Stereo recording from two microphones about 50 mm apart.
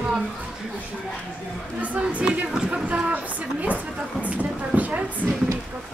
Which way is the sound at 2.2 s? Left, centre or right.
Centre.